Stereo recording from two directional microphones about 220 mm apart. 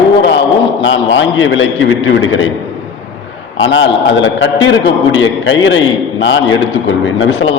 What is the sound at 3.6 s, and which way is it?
A man's voice, 55° left (ahead or behind).